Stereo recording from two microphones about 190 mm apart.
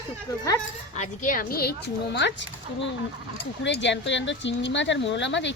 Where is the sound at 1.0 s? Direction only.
45° left (ahead or behind).